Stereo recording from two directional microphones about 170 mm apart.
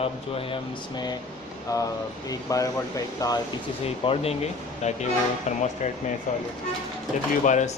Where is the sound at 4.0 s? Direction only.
35° left (ahead or behind).